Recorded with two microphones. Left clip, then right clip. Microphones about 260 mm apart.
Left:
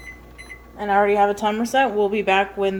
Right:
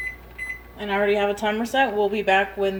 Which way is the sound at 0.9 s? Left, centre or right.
Centre.